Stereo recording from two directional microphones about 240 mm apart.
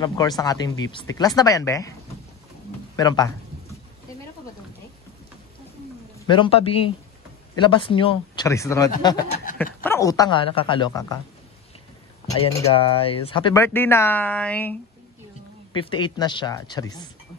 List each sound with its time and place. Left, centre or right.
0.0 s speech: centre
3.0 s speech: centre
6.1 s speech: centre
12.3 s speech: centre
13.6 s speech: centre
15.7 s speech: centre